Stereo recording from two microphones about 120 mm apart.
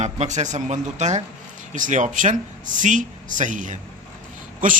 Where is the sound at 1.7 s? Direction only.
90° right.